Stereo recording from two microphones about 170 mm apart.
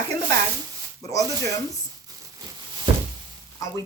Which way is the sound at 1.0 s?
20° left (ahead or behind).